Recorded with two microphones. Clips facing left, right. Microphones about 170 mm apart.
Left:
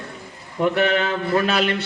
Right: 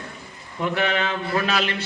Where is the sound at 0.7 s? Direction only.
45° left (ahead or behind).